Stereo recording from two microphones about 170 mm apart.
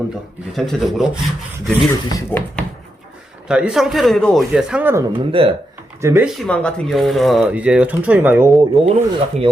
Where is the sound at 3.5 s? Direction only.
5° right (ahead or behind).